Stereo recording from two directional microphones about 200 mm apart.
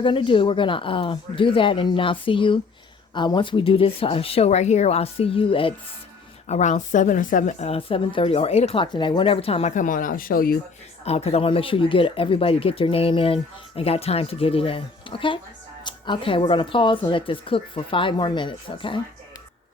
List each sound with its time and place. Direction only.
0.0 s a woman's voice: 25° left (ahead or behind); by 10.6 s 45° left (ahead or behind)
11.0 s speech: 30° left (ahead or behind)